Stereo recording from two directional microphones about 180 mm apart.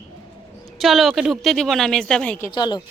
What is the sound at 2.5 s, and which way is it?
Speech, 25° left (ahead or behind).